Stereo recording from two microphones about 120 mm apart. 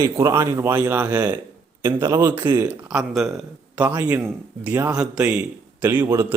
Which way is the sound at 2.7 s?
5° right (ahead or behind).